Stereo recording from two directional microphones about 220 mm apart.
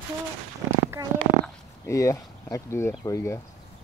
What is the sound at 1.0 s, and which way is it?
Speech, 15° right (ahead or behind).